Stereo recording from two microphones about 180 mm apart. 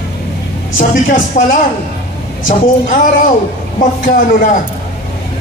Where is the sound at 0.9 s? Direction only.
50° left (ahead or behind).